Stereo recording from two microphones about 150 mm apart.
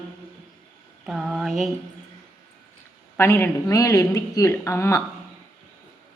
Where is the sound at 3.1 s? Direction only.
15° left (ahead or behind).